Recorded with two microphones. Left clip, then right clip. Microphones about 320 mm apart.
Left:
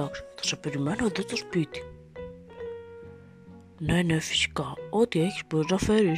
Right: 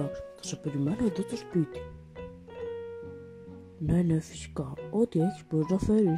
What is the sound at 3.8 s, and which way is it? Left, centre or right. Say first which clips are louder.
Speech: left 3 dB; left.